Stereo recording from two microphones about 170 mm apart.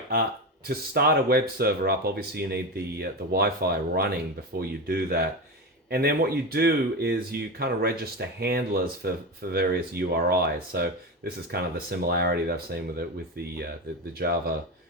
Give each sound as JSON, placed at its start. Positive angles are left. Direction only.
{"t": 0.7, "sound": "speech", "side_deg": -65}
{"t": 14.2, "sound": "speech", "side_deg": -65}